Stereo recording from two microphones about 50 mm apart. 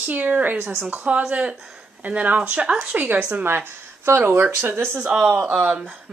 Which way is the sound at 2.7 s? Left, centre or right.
Centre.